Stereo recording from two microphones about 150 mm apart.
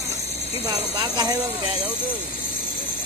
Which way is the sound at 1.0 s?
25° right (ahead or behind).